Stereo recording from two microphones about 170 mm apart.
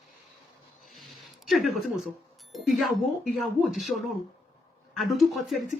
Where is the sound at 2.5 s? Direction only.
Centre (ahead or behind).